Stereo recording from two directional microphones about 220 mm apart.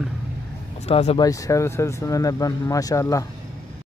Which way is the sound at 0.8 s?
25° left (ahead or behind).